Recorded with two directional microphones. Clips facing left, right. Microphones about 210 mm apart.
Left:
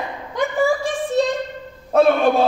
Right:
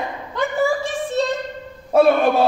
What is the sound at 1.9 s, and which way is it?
Speech, 10° right (ahead or behind).